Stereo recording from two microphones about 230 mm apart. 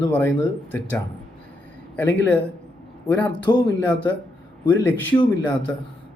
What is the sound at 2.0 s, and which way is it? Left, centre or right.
Speech, centre.